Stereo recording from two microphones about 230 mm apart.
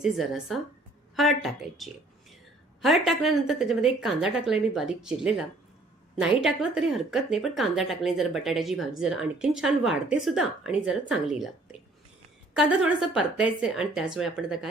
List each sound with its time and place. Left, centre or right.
0.0 s speech: centre